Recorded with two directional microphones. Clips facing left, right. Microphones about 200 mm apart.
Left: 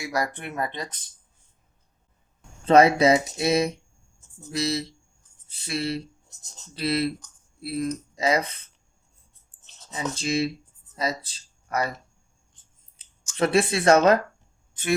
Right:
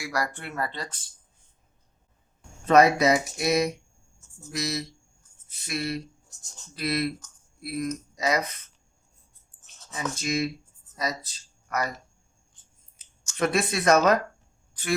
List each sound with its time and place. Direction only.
0.0 s speech: 20° left (ahead or behind)
2.6 s speech: 30° left (ahead or behind)
9.6 s speech: 25° left (ahead or behind)
13.3 s speech: 30° left (ahead or behind)